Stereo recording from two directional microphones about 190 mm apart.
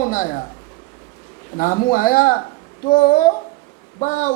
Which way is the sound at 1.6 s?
50° left (ahead or behind).